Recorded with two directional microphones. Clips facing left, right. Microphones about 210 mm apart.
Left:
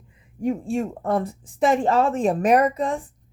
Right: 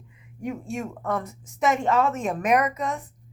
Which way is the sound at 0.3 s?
30° left (ahead or behind).